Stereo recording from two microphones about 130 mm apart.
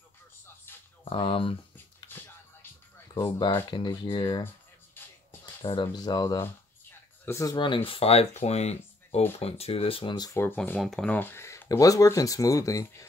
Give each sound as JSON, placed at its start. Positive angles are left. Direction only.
{"t": 0.7, "sound": "a sound", "side_deg": 15}
{"t": 1.0, "sound": "a sound", "side_deg": 40}
{"t": 3.2, "sound": "speech", "side_deg": 30}
{"t": 5.7, "sound": "speech", "side_deg": 35}
{"t": 7.5, "sound": "speech", "side_deg": 40}
{"t": 10.4, "sound": "speech", "side_deg": 15}
{"t": 10.8, "sound": "speech", "side_deg": 0}
{"t": 11.1, "sound": "speech", "side_deg": 15}